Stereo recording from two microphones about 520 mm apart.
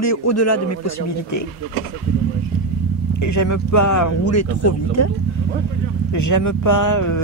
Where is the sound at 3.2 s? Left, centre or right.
Left.